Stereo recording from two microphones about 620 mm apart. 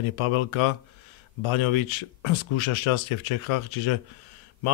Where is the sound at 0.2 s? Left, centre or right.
Left.